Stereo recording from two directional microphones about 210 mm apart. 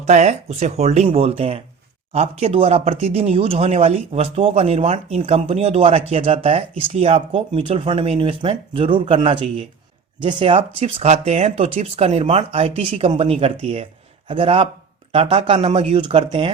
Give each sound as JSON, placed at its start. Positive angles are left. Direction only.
{"t": 0.0, "sound": "speech", "side_deg": -35}